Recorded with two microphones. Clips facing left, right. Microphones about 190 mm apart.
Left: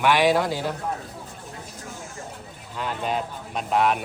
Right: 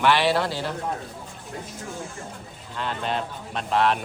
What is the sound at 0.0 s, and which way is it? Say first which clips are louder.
Speech: left 1 dB; 15° left (ahead or behind).